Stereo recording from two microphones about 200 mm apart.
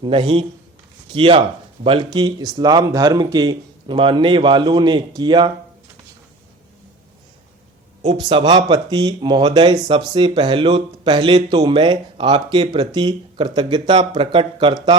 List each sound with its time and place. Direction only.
0.0 s speech: 25° right (ahead or behind)
8.0 s speech: 25° right (ahead or behind)